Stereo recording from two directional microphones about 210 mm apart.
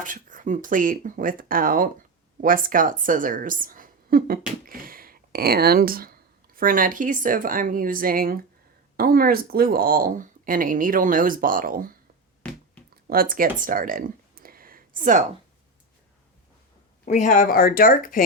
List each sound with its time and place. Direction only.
0.0 s a woman's voice: 40° right (ahead or behind)
12.4 s finger snapping: 5° left (ahead or behind)
13.1 s a sound: 45° right (ahead or behind)
17.1 s speech: 35° left (ahead or behind)